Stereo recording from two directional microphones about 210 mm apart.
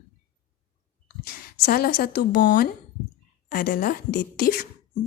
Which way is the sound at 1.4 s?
45° left (ahead or behind).